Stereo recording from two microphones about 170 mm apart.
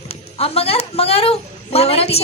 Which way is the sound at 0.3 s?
35° left (ahead or behind).